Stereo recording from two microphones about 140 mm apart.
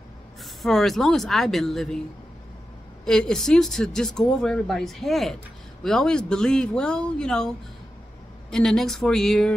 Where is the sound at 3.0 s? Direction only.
5° left (ahead or behind).